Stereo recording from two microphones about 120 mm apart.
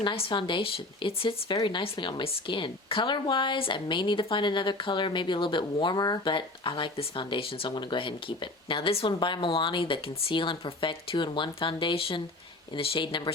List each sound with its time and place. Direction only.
0.0 s a woman's voice: 45° left (ahead or behind)